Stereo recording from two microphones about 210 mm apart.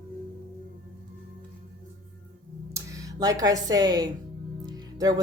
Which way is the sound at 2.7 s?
15° right (ahead or behind).